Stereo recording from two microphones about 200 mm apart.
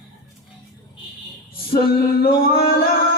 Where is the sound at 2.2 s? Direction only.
50° left (ahead or behind).